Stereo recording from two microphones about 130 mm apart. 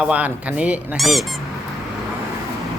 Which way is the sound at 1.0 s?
Centre (ahead or behind).